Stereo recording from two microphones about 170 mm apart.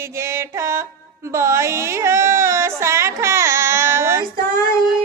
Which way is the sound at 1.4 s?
15° right (ahead or behind).